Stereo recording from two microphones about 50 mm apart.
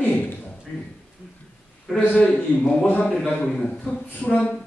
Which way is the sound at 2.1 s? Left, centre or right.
Left.